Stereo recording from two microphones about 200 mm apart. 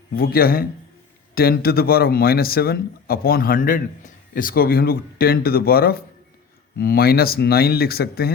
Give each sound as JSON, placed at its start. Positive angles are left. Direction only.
{"t": 0.2, "sound": "speech", "side_deg": 50}